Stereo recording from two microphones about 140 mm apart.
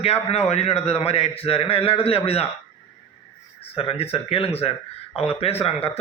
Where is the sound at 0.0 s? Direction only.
45° left (ahead or behind).